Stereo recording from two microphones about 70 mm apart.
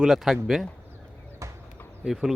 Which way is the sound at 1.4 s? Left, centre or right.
Right.